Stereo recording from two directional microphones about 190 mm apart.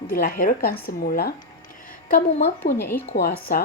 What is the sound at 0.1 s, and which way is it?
A woman's voice, 50° left (ahead or behind).